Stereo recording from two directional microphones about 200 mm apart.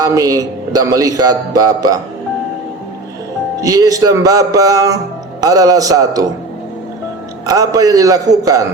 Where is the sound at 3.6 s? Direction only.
15° right (ahead or behind).